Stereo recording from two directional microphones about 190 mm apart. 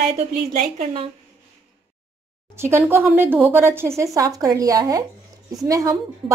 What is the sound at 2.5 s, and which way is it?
Speech, 15° right (ahead or behind).